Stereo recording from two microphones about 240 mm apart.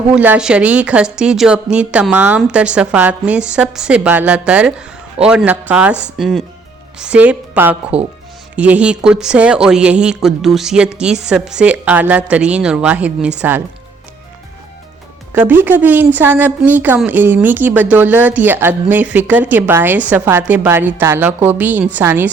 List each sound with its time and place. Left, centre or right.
0.1 s a woman's voice: centre
15.3 s a woman's voice: centre